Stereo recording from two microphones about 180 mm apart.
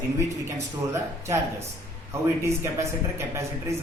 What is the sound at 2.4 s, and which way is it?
Speech, 15° right (ahead or behind).